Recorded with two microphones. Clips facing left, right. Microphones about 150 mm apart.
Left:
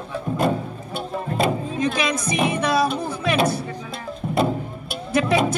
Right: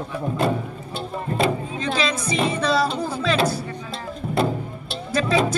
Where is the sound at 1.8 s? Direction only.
15° left (ahead or behind).